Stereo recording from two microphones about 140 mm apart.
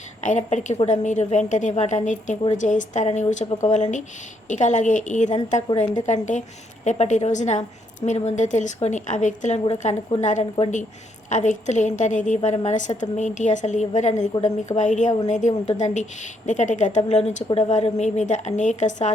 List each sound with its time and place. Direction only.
0.2 s a woman's voice: 60° left (ahead or behind)
4.4 s a woman's voice: 60° left (ahead or behind)